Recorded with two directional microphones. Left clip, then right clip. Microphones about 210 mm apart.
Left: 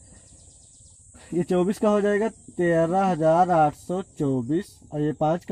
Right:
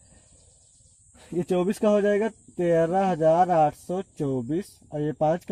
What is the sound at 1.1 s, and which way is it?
Speech, 40° right (ahead or behind).